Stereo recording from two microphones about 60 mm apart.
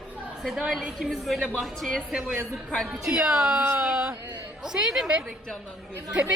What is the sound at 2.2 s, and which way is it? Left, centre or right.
Speech, centre.